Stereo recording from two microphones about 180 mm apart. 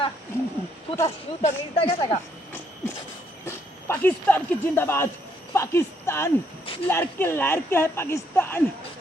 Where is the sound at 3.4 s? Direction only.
15° left (ahead or behind).